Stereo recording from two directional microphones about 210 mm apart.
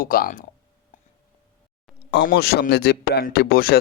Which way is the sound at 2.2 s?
50° left (ahead or behind).